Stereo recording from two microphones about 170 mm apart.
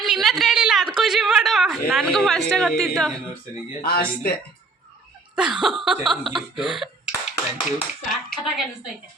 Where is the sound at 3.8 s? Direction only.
60° left (ahead or behind).